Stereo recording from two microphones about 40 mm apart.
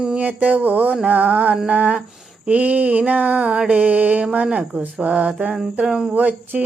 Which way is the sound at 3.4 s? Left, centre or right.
Right.